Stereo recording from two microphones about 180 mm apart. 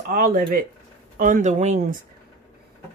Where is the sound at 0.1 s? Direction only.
50° right (ahead or behind).